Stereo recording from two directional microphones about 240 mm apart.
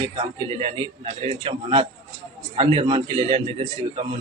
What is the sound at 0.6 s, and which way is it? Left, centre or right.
A man's voice, right.